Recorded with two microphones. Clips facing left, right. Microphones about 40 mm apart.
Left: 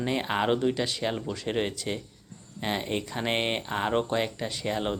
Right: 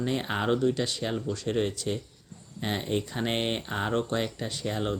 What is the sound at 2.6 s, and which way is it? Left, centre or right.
Speech, centre.